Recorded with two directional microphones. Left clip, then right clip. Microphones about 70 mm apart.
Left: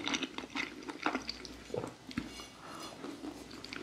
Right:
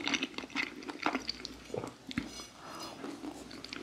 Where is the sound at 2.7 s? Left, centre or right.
Right.